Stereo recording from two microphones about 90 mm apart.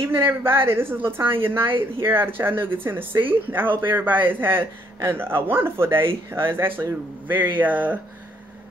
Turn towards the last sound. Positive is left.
turn(degrees=-20)  # may be behind; listen again after turning